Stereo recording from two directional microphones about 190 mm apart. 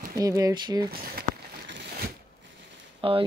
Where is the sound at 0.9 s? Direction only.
50° right (ahead or behind).